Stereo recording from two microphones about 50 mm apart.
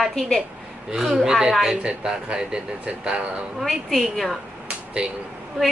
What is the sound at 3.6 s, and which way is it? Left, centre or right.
Speech, centre.